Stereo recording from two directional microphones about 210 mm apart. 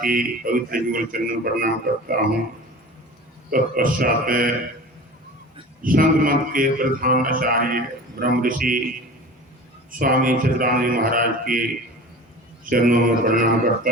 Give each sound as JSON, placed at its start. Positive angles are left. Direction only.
{"t": 0.0, "sound": "a man's voice", "side_deg": -40}
{"t": 3.5, "sound": "speech", "side_deg": -40}
{"t": 5.8, "sound": "a man's voice", "side_deg": -40}
{"t": 10.0, "sound": "speech", "side_deg": -40}
{"t": 12.6, "sound": "a man's voice", "side_deg": -40}